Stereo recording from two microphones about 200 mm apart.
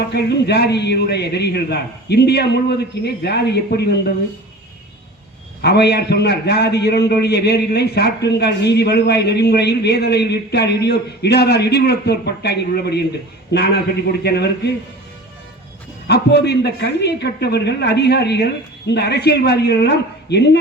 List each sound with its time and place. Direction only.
0.1 s a man's voice: 55° left (ahead or behind)
5.6 s a man's voice: 55° left (ahead or behind)
16.0 s a man's voice: 55° left (ahead or behind)